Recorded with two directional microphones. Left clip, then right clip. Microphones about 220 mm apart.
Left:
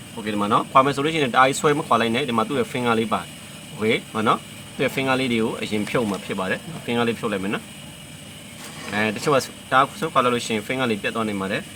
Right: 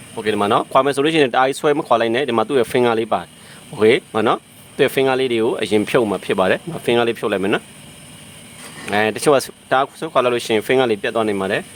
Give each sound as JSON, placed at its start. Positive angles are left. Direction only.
{"t": 0.3, "sound": "speech", "side_deg": -50}
{"t": 8.9, "sound": "speech", "side_deg": -55}